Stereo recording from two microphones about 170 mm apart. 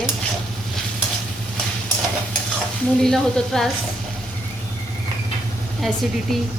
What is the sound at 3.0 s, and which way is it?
Speech, 5° left (ahead or behind).